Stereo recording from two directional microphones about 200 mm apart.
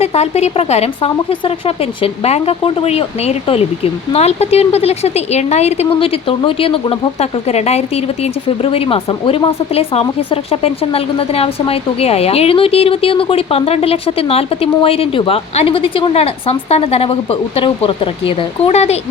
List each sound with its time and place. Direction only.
0.0 s a woman's voice: 30° left (ahead or behind)